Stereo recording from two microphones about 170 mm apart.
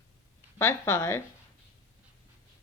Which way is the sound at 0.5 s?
15° left (ahead or behind).